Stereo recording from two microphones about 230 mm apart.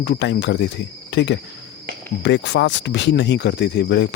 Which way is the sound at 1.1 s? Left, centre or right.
Left.